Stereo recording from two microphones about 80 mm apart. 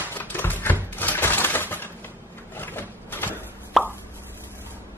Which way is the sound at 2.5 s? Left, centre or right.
Left.